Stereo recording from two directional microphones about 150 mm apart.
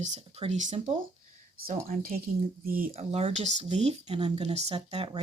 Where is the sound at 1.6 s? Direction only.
75° right (ahead or behind).